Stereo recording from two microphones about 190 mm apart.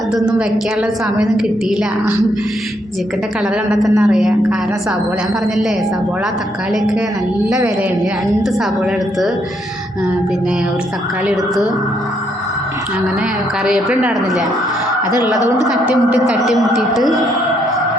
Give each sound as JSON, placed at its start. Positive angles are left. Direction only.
{"t": 0.1, "sound": "speech", "side_deg": -5}
{"t": 3.7, "sound": "speech", "side_deg": 0}
{"t": 13.7, "sound": "speech", "side_deg": -5}
{"t": 15.4, "sound": "speech", "side_deg": 20}
{"t": 15.7, "sound": "speech", "side_deg": -5}